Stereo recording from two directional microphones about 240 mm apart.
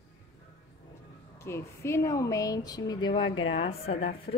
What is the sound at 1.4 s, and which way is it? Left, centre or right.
A woman's voice, centre.